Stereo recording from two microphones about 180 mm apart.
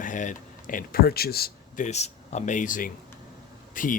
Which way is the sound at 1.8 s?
40° left (ahead or behind).